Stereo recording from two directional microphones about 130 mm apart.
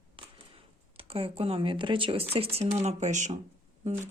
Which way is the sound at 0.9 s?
45° right (ahead or behind).